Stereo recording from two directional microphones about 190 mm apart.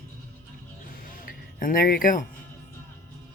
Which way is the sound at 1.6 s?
50° left (ahead or behind).